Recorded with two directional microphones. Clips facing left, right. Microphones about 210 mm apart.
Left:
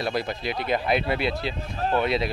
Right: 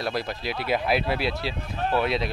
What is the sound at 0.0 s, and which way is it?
Speech, centre (ahead or behind).